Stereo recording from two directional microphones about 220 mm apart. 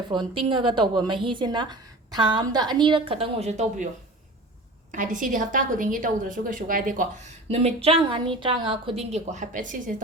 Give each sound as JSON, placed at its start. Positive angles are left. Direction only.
{"t": 0.1, "sound": "a woman's voice", "side_deg": -20}
{"t": 4.9, "sound": "a woman's voice", "side_deg": -35}
{"t": 7.5, "sound": "a woman's voice", "side_deg": -25}